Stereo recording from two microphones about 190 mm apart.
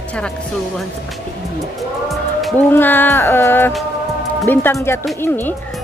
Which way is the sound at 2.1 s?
Centre (ahead or behind).